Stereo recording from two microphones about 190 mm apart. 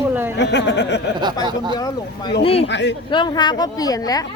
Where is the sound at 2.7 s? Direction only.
65° left (ahead or behind).